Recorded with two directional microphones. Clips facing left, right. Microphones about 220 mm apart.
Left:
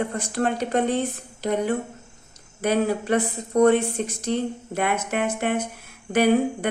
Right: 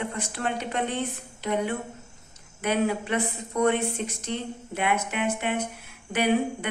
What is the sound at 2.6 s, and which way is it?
Speech, 40° left (ahead or behind).